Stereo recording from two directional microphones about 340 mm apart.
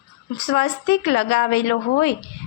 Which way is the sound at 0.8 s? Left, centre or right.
Left.